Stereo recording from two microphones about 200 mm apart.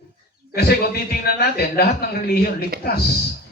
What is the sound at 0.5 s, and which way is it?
A man's voice, 50° left (ahead or behind).